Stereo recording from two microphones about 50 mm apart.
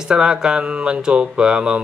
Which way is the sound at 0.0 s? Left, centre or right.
Centre.